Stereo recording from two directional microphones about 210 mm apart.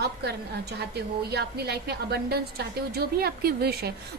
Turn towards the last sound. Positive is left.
turn(degrees=-50)  # may be behind; listen again after turning